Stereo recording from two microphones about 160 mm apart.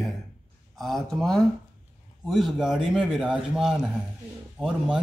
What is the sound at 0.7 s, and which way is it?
Speech, centre (ahead or behind).